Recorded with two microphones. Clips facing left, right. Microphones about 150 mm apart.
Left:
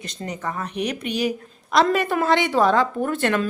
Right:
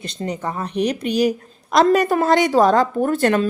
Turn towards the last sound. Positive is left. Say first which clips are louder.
# right 5 dB
turn(degrees=-40)  # may be behind; listen again after turning